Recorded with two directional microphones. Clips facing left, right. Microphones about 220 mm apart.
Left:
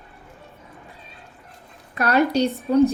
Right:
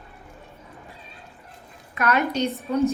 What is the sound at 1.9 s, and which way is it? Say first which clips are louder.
Speech: left 4 dB; 35° left (ahead or behind).